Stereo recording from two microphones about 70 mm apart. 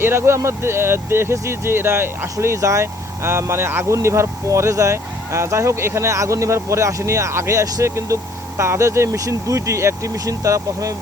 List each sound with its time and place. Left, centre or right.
0.0 s speech: right